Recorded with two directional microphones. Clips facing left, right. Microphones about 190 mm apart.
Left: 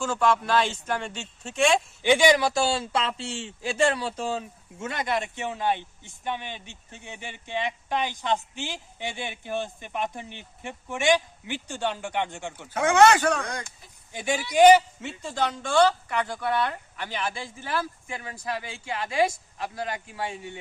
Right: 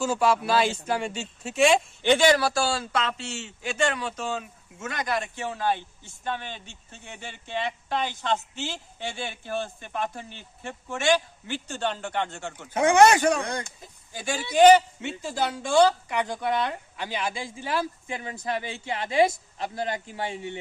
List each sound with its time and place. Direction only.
0.0 s a man's voice: 10° right (ahead or behind)
2.0 s a man's voice: 10° left (ahead or behind)
12.5 s a man's voice: 15° right (ahead or behind)
13.4 s speech: 25° right (ahead or behind)
14.1 s speech: 20° left (ahead or behind)
14.5 s a man's voice: 10° left (ahead or behind); by 20.6 s 25° right (ahead or behind)